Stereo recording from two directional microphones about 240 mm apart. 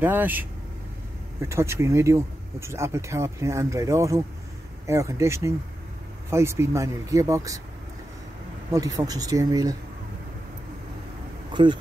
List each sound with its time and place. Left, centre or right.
0.0 s speech: centre
8.7 s speech: centre
11.5 s speech: centre